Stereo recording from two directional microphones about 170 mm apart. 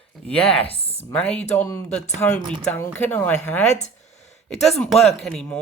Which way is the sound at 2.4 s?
30° right (ahead or behind).